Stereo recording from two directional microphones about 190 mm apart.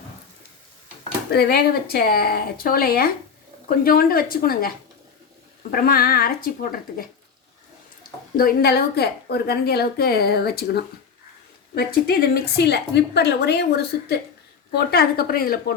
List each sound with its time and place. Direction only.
1.3 s a woman's voice: 55° left (ahead or behind)
5.7 s speech: 50° left (ahead or behind)
8.4 s a woman's voice: 50° left (ahead or behind)
14.8 s speech: 55° left (ahead or behind)